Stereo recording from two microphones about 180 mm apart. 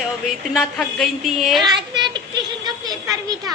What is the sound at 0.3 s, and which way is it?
Speech, centre (ahead or behind).